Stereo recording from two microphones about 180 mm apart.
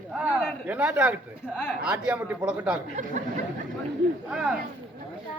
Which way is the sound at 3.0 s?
40° right (ahead or behind).